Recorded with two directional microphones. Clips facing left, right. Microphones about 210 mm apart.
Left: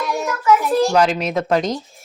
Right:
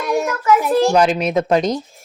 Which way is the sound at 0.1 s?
55° right (ahead or behind).